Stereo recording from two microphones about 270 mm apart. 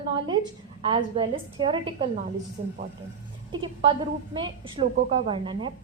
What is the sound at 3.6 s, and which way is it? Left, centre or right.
A woman's voice, centre.